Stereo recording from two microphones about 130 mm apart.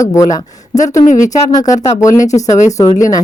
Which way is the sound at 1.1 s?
80° left.